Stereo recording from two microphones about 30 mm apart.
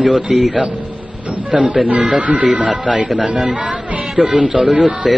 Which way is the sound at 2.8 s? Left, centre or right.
Right.